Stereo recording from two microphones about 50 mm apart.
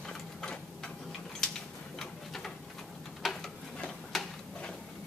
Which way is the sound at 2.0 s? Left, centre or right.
Centre.